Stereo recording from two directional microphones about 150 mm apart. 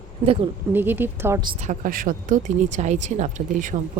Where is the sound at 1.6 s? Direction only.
60° right (ahead or behind).